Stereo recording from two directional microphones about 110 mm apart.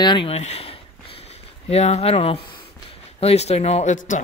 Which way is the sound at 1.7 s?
70° left (ahead or behind).